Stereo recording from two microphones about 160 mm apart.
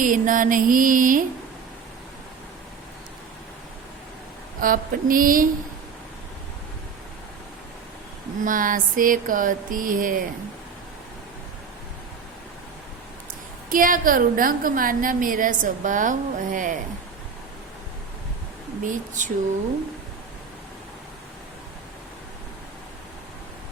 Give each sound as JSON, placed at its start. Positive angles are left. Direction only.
{"t": 0.0, "sound": "a woman's voice", "side_deg": -55}
{"t": 4.6, "sound": "a woman's voice", "side_deg": -60}
{"t": 8.4, "sound": "a woman's voice", "side_deg": -55}
{"t": 13.7, "sound": "a woman's voice", "side_deg": -60}
{"t": 18.8, "sound": "speech", "side_deg": -50}